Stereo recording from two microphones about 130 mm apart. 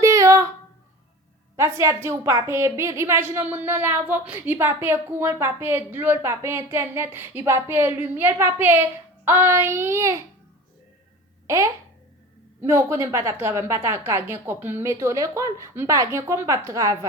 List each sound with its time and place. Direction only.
0.0 s a sound: 25° right (ahead or behind)
1.5 s a woman's voice: 20° right (ahead or behind)
11.4 s a child's voice: 25° right (ahead or behind)